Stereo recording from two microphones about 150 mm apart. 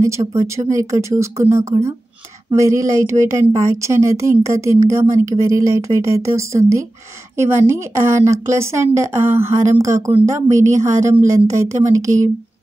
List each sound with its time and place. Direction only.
0.0 s a woman's voice: 20° right (ahead or behind)